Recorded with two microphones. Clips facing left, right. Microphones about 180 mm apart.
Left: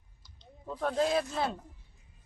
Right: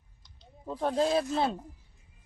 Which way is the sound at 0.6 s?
30° right (ahead or behind).